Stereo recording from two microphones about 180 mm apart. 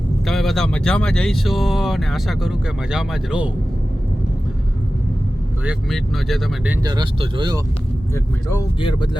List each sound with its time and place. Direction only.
0.3 s speech: centre (ahead or behind)
5.6 s speech: centre (ahead or behind)
6.8 s speech: 25° right (ahead or behind)
8.1 s speech: 15° left (ahead or behind)
8.8 s speech: 25° left (ahead or behind)